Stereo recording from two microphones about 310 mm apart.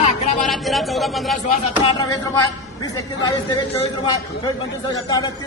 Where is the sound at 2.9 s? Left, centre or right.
Centre.